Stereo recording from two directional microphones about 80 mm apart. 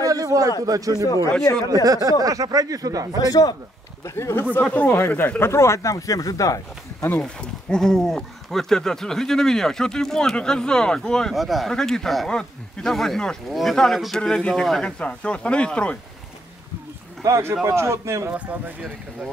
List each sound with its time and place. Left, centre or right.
0.0 s a sound: right
0.7 s speech: right
1.0 s a man's voice: left
1.7 s speech: right
3.2 s a man's voice: left
4.0 s speech: left
7.2 s speech: centre
17.6 s a man's voice: right
18.3 s speech: centre